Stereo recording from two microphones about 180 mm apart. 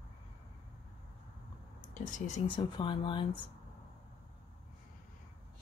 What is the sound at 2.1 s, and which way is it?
Speech, 40° left (ahead or behind).